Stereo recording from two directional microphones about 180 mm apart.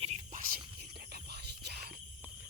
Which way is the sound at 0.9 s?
65° right (ahead or behind).